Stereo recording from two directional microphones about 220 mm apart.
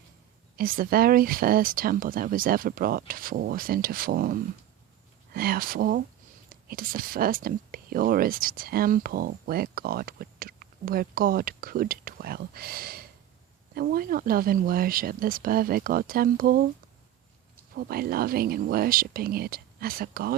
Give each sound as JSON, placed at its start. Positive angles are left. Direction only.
{"t": 0.5, "sound": "speech", "side_deg": -40}
{"t": 17.7, "sound": "speech", "side_deg": -45}